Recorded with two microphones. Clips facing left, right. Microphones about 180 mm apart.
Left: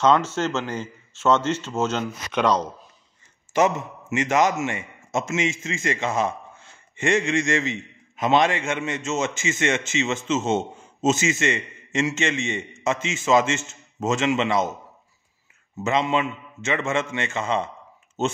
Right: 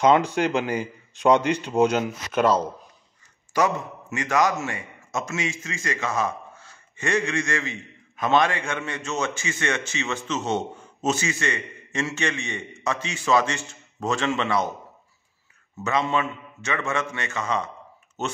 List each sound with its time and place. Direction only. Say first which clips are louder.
0.0 s a man's voice: right 1 dB; 15° right (ahead or behind)
3.5 s a man's voice: left 2 dB; 20° left (ahead or behind)
15.8 s a man's voice: left 2 dB; 20° left (ahead or behind)